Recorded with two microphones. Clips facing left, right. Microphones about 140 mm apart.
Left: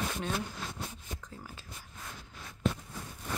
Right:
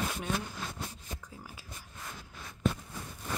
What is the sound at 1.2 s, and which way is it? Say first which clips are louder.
Speech: left 1 dB; 10° right (ahead or behind).